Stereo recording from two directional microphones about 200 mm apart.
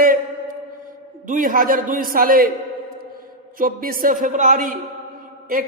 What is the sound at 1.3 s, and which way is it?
A man's voice, 40° right (ahead or behind).